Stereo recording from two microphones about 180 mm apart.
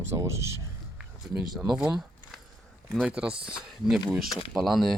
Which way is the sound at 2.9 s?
Centre (ahead or behind).